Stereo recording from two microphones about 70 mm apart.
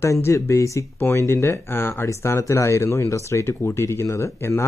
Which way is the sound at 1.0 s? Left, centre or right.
Left.